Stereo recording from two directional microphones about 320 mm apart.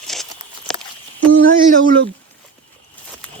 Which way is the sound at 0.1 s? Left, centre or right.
Centre.